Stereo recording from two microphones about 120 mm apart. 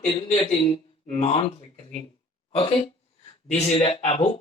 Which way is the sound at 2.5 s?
50° left (ahead or behind).